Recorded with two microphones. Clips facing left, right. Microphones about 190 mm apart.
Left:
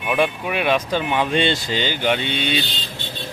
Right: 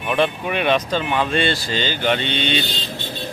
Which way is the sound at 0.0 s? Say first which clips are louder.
Even; 5° left (ahead or behind).